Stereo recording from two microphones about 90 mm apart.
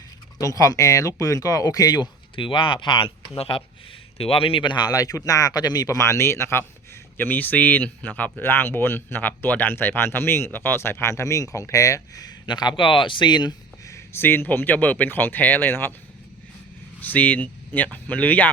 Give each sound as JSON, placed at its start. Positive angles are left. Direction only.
{"t": 0.3, "sound": "speech", "side_deg": 40}
{"t": 2.3, "sound": "speech", "side_deg": 70}
{"t": 3.3, "sound": "speech", "side_deg": 80}
{"t": 4.9, "sound": "speech", "side_deg": 40}
{"t": 12.5, "sound": "speech", "side_deg": 55}
{"t": 13.8, "sound": "speech", "side_deg": 30}
{"t": 17.0, "sound": "speech", "side_deg": 20}